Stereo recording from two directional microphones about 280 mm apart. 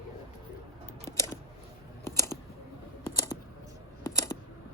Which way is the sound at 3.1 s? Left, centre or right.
Centre.